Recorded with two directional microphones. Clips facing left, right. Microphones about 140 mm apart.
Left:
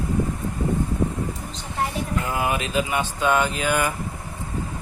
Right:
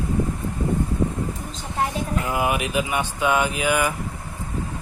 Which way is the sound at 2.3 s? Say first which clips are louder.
Right 2 dB; 15° right (ahead or behind).